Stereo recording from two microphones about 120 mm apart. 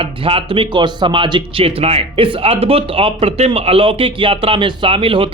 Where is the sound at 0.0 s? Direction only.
50° right (ahead or behind).